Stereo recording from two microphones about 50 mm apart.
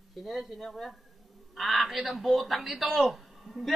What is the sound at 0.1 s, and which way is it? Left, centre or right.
Speech, centre.